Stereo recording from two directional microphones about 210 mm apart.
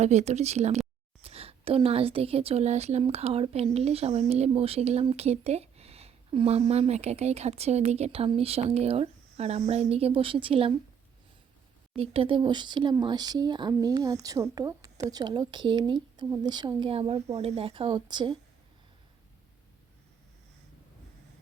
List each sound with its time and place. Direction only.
0.0 s a woman's voice: 35° right (ahead or behind)
11.9 s a woman's voice: 25° right (ahead or behind)